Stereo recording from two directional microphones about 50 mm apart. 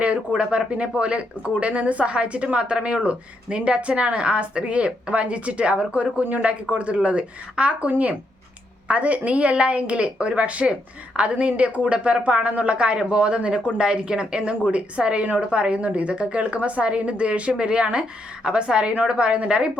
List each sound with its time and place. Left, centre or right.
0.3 s a woman's voice: right